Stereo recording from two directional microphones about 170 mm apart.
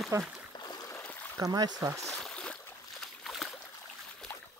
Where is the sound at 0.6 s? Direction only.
25° left (ahead or behind).